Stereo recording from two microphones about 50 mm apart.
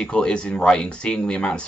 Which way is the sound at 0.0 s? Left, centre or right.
Centre.